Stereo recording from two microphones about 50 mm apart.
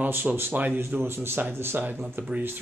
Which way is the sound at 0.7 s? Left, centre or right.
Right.